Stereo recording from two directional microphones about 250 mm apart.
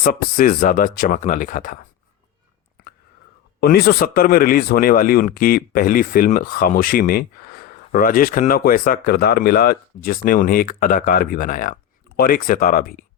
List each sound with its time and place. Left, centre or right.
0.0 s speech: left
3.6 s speech: left